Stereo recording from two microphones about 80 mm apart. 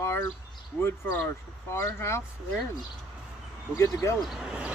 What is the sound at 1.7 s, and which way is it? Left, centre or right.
Speech, left.